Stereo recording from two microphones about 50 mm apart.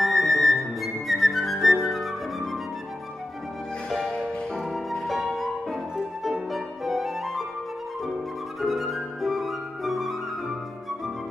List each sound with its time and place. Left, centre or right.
0.0 s music: centre
4.2 s music: centre
8.5 s flute: centre